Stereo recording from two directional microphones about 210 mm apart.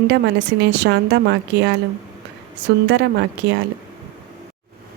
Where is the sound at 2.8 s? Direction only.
55° right (ahead or behind).